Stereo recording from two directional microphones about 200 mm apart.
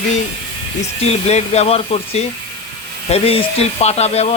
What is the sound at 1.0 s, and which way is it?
Speech, 30° left (ahead or behind).